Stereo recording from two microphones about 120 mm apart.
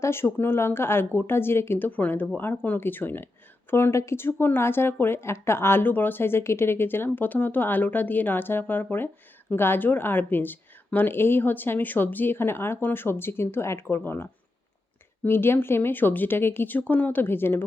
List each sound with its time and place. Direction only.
0.0 s speech: 20° left (ahead or behind)